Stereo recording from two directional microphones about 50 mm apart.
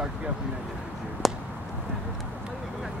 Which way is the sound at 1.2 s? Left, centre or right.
Centre.